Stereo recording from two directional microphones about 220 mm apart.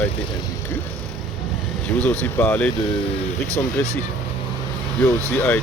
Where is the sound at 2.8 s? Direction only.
20° left (ahead or behind).